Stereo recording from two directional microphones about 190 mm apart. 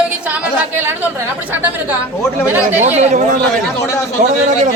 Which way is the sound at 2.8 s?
35° right (ahead or behind).